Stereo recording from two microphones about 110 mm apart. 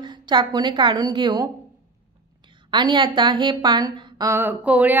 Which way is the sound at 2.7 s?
45° right (ahead or behind).